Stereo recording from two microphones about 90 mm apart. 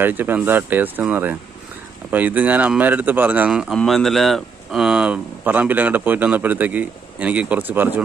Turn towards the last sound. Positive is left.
turn(degrees=-20)  # may be behind; listen again after turning